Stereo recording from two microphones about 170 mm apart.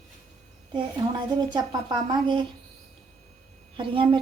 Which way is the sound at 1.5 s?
25° right (ahead or behind).